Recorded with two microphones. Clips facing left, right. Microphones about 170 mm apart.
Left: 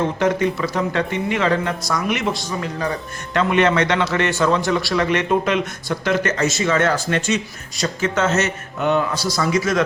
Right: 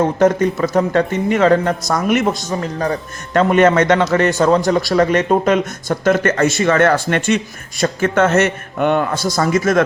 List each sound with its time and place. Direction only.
0.0 s a man's voice: 45° right (ahead or behind)